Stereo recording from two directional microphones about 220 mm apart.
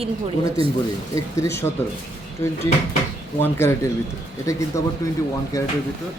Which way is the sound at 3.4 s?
10° left (ahead or behind).